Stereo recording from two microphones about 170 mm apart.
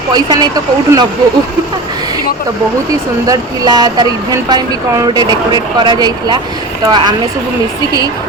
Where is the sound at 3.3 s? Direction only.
25° right (ahead or behind).